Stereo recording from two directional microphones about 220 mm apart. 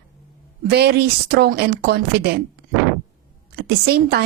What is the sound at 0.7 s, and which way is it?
A woman's voice, 50° right (ahead or behind).